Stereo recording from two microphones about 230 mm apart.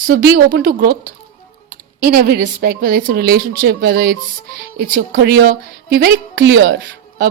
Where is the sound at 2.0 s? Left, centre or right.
Right.